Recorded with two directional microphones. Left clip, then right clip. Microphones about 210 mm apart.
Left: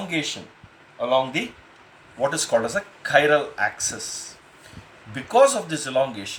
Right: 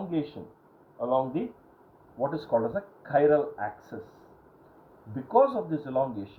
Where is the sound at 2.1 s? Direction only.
45° left (ahead or behind).